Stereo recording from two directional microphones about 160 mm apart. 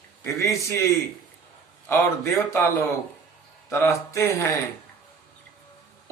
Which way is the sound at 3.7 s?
15° left (ahead or behind).